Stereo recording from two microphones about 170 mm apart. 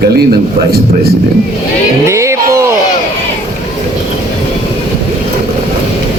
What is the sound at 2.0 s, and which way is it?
Music, 15° right (ahead or behind).